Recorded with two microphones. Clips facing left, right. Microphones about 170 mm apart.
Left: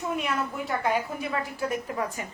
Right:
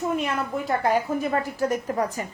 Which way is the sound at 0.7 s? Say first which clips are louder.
Right 6 dB; 40° right (ahead or behind).